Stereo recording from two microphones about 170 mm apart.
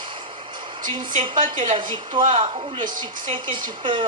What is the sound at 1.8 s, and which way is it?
Speech, 30° right (ahead or behind).